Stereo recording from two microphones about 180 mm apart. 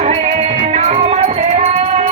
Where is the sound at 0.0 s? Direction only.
40° right (ahead or behind).